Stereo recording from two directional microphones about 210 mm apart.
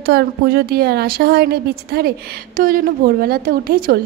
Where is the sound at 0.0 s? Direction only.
50° right (ahead or behind).